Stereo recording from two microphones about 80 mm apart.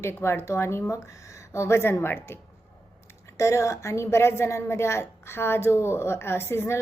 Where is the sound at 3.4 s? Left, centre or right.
Left.